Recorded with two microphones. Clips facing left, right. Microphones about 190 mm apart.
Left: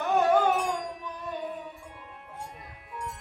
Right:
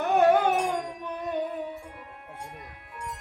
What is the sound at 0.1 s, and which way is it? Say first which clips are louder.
Carnatic music: right 3 dB; 60° right (ahead or behind).